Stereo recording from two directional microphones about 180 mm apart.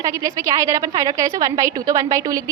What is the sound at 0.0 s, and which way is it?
A woman's voice, 15° right (ahead or behind).